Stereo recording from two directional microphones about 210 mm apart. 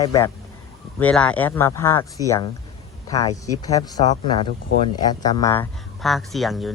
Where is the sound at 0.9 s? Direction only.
5° left (ahead or behind).